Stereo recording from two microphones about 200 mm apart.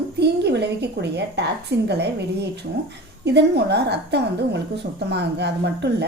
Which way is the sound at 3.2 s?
55° right (ahead or behind).